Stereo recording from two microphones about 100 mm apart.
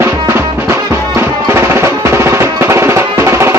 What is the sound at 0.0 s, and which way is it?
Music, 25° right (ahead or behind).